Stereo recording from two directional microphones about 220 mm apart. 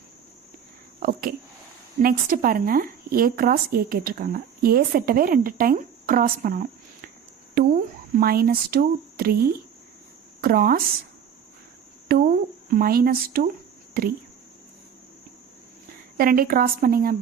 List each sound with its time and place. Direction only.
0.9 s a woman's voice: 40° right (ahead or behind)
12.1 s a sound: 40° right (ahead or behind)
12.7 s a woman's voice: 40° right (ahead or behind)
16.1 s a woman's voice: 40° right (ahead or behind)